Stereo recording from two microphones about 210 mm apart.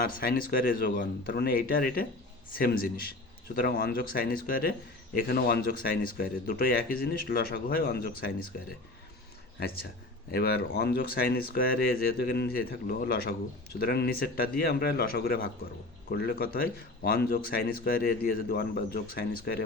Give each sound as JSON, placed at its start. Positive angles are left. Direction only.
{"t": 0.2, "sound": "speech", "side_deg": 40}
{"t": 10.3, "sound": "speech", "side_deg": 50}